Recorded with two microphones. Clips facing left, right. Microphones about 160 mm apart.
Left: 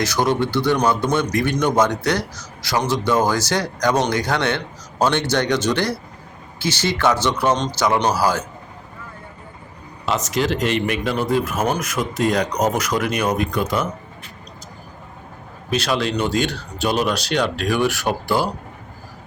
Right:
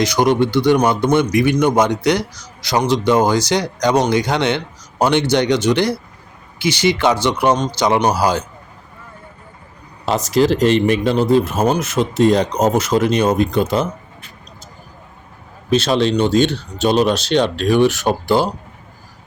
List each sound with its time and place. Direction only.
0.0 s speech: 15° right (ahead or behind)
10.1 s speech: 35° right (ahead or behind)
15.7 s speech: 25° right (ahead or behind)